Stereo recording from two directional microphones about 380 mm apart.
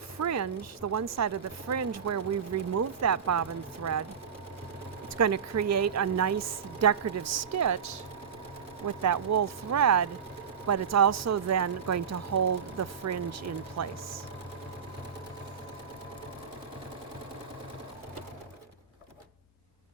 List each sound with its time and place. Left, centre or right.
0.2 s a woman's voice: right
5.1 s a woman's voice: right
9.0 s a woman's voice: right